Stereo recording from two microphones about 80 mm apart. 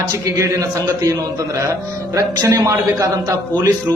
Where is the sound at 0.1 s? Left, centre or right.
Right.